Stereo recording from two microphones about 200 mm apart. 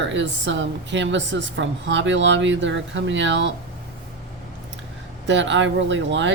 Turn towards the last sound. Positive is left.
turn(degrees=-65)  # may be behind; listen again after turning